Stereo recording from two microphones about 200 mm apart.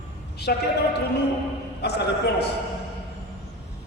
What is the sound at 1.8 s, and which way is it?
Speech, 55° left (ahead or behind).